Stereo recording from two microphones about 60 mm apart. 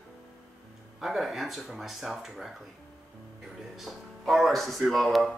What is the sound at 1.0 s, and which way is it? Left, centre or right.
Speech, centre.